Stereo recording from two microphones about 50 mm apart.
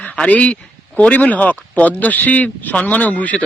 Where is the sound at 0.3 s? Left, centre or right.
Left.